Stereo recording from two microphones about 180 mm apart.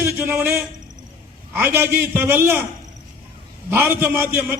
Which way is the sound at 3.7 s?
10° right (ahead or behind).